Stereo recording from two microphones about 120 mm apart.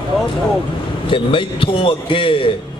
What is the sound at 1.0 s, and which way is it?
A man's voice, 45° left (ahead or behind).